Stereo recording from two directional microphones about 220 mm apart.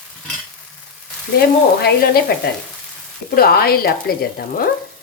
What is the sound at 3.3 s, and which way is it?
Speech, 45° left (ahead or behind).